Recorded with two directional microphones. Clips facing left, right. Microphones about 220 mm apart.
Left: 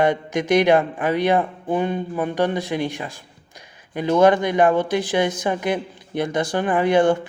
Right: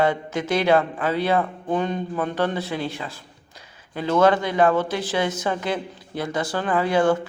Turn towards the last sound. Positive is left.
turn(degrees=20)  # may be behind; listen again after turning